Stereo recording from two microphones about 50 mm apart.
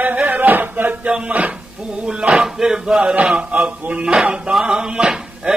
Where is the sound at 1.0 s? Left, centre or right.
Right.